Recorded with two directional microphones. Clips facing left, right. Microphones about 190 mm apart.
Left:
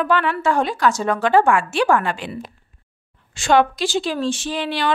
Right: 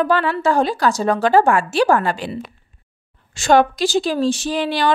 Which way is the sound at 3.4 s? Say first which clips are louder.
Right 2 dB; 40° right (ahead or behind).